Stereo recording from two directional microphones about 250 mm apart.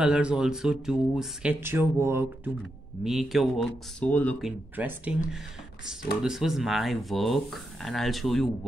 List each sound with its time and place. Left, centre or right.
0.0 s speech: centre